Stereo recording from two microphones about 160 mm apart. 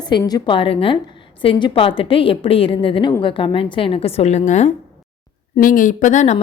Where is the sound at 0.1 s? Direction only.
25° left (ahead or behind); by 4.7 s 45° left (ahead or behind).